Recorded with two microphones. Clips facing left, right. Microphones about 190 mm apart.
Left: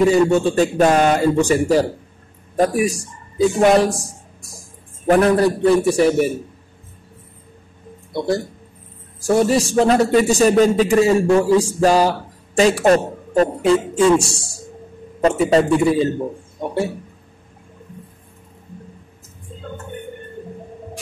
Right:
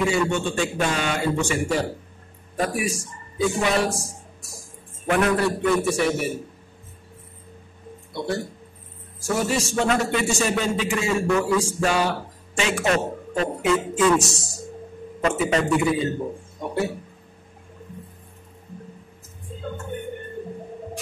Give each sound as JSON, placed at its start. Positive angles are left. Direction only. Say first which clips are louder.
{"t": 0.0, "sound": "a man's voice", "louder": "left 8 dB", "side_deg": 40}
{"t": 5.0, "sound": "a man's voice", "louder": "left 7 dB", "side_deg": 35}
{"t": 9.2, "sound": "a man's voice", "louder": "left 8 dB", "side_deg": 35}